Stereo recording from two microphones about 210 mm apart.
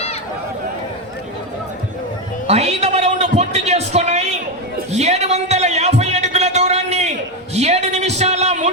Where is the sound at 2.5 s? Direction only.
30° right (ahead or behind).